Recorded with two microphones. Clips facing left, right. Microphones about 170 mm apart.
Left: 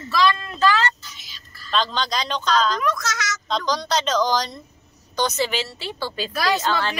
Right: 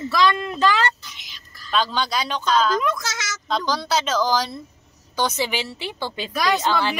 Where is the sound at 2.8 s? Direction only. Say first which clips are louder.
Left 1 dB; 25° right (ahead or behind).